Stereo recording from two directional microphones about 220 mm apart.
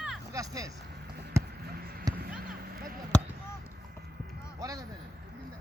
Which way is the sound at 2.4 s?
40° right (ahead or behind).